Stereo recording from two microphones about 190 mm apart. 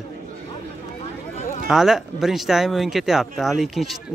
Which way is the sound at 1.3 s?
35° left (ahead or behind).